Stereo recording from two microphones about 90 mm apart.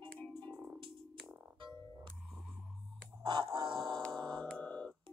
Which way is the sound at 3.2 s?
60° right (ahead or behind).